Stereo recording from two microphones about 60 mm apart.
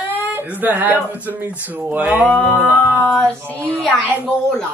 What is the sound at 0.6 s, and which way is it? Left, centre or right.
Speech, right.